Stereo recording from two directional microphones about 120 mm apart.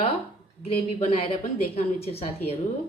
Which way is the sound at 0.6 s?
55° left (ahead or behind).